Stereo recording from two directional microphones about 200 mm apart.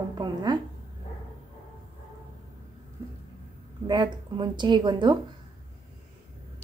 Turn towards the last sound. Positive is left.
turn(degrees=-20)  # may be behind; listen again after turning